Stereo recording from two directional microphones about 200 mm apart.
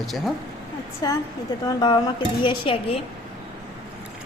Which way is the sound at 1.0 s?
20° left (ahead or behind).